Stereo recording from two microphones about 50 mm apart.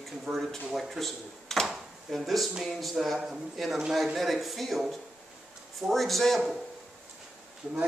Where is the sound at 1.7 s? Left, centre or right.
Centre.